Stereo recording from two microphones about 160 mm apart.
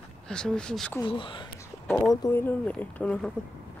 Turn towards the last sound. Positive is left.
turn(degrees=10)  # may be behind; listen again after turning